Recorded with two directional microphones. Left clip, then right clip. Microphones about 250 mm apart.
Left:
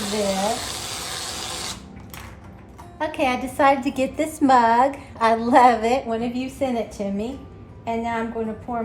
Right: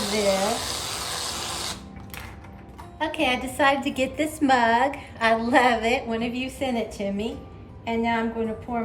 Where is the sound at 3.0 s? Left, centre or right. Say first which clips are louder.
Left 2 dB; left.